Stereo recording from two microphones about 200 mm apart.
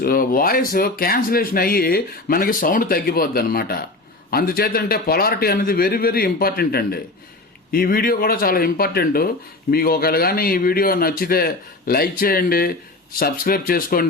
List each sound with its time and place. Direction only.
0.0 s speech: 45° left (ahead or behind)